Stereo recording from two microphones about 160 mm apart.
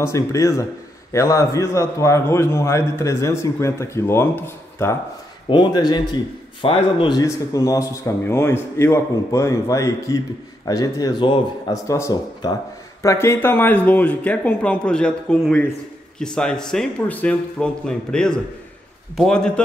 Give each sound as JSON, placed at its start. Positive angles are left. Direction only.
{"t": 0.0, "sound": "a man's voice", "side_deg": 20}
{"t": 5.5, "sound": "a man's voice", "side_deg": 25}